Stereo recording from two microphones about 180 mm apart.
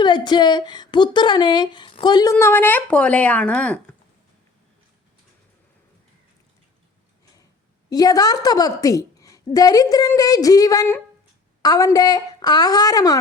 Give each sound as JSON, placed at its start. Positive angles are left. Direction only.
{"t": 0.0, "sound": "a woman's voice", "side_deg": 25}
{"t": 2.3, "sound": "speech", "side_deg": 10}
{"t": 7.9, "sound": "a woman's voice", "side_deg": 20}